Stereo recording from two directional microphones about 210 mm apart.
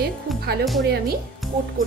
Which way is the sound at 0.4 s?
50° right (ahead or behind).